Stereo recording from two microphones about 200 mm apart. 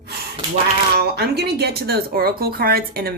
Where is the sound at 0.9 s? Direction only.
55° right (ahead or behind).